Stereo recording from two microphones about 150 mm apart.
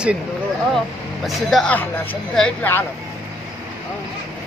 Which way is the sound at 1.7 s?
15° left (ahead or behind).